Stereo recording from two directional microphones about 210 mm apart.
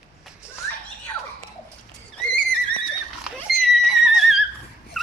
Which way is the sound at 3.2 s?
Centre (ahead or behind).